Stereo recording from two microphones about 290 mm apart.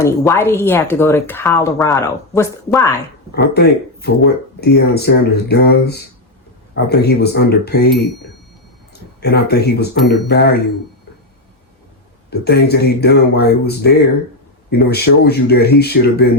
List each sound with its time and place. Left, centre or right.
0.0 s speech: centre
3.3 s speech: left
9.2 s speech: left
12.3 s speech: left